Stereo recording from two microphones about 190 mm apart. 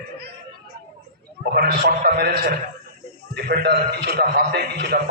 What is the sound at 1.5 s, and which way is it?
A man's voice, 60° right (ahead or behind).